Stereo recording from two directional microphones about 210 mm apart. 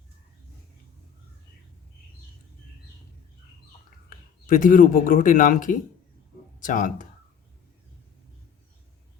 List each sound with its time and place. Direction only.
4.4 s a man's voice: 40° left (ahead or behind)